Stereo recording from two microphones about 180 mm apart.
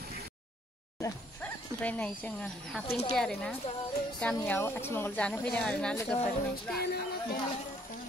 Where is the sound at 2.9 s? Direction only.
35° left (ahead or behind).